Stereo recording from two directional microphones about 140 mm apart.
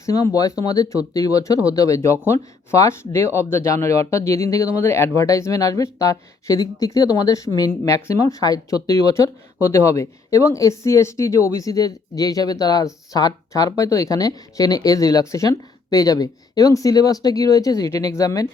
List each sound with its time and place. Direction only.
0.0 s speech: 25° left (ahead or behind)